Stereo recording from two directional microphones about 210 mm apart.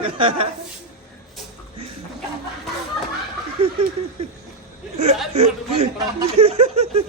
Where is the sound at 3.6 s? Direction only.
25° right (ahead or behind).